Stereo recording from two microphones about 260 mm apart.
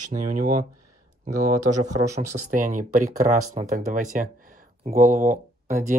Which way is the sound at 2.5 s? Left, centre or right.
Right.